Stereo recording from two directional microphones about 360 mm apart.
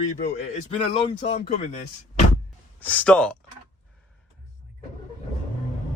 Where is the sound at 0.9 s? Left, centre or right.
Centre.